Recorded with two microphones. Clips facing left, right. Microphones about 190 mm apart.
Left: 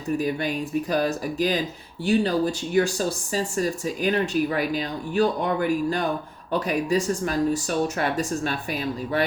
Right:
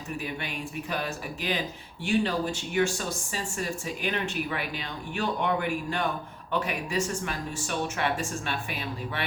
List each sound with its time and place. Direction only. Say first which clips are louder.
0.2 s speech: left 9 dB; 40° left (ahead or behind)